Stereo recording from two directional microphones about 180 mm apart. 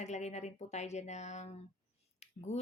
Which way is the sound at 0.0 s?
40° left (ahead or behind).